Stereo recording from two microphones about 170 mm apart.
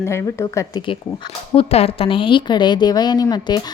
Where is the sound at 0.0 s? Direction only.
15° left (ahead or behind).